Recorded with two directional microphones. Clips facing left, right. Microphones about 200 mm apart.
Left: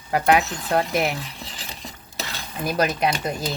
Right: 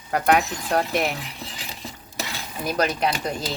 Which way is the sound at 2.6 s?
5° left (ahead or behind).